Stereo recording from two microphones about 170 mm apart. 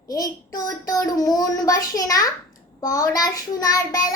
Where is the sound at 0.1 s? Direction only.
20° left (ahead or behind).